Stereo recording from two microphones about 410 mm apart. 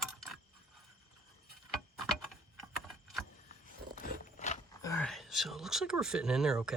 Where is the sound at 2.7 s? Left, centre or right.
Centre.